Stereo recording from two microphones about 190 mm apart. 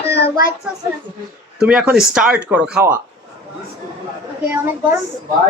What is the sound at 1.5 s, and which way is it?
Speech, 5° right (ahead or behind).